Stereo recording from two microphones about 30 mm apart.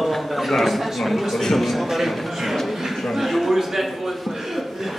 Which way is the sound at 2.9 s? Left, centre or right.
Centre.